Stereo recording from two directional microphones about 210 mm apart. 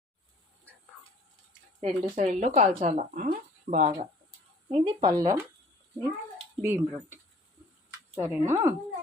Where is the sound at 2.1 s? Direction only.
35° right (ahead or behind).